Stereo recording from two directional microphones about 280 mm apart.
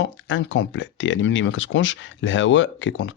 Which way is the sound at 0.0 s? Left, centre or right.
Left.